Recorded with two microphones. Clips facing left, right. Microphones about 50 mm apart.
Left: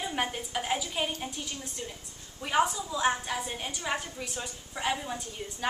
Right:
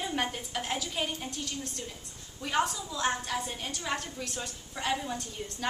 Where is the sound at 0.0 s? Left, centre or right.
Centre.